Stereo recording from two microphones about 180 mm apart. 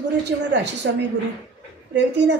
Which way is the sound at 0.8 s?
75° right (ahead or behind).